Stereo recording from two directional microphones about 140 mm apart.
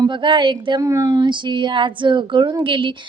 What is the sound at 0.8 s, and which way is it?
A woman's voice, 25° right (ahead or behind).